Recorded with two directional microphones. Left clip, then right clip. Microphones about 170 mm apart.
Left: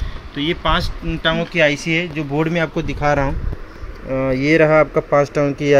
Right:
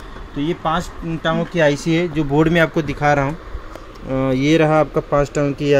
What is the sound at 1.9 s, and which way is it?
Speech, 30° right (ahead or behind).